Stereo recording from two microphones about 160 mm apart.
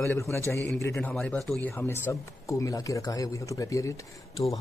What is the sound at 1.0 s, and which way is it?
Speech, 5° left (ahead or behind).